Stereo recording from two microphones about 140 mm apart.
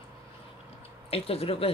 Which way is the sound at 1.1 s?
45° left (ahead or behind).